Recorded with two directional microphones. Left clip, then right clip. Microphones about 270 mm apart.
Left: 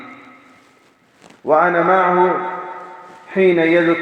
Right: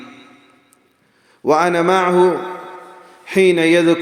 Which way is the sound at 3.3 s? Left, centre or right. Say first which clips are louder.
Right 1 dB; right.